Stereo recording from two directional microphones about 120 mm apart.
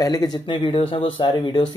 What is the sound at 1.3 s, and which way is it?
Speech, 40° left (ahead or behind).